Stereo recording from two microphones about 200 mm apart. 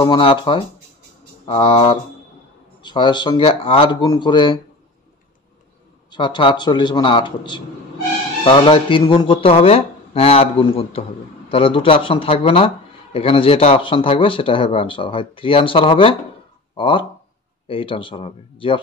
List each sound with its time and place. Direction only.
0.0 s speech: 25° left (ahead or behind)
6.0 s speech: 25° left (ahead or behind)